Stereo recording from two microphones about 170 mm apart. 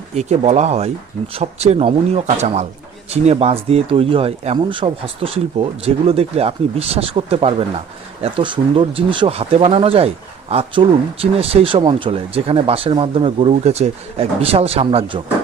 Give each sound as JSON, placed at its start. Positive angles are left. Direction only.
{"t": 0.1, "sound": "speech", "side_deg": -40}